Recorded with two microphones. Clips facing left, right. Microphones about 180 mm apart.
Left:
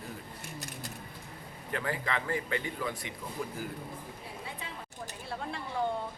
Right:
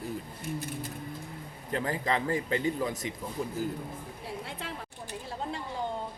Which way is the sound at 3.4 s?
25° right (ahead or behind).